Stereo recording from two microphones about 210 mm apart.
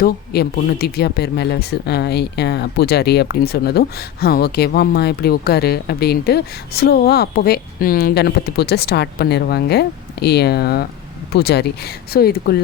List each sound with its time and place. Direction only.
0.0 s speech: 50° left (ahead or behind)